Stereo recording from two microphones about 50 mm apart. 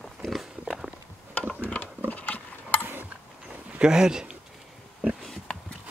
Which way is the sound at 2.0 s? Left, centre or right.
Left.